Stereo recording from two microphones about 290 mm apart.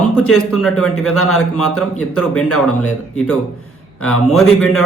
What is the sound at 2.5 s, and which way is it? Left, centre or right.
Speech, left.